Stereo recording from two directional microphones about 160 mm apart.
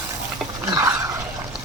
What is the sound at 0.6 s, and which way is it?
Dog, 15° right (ahead or behind).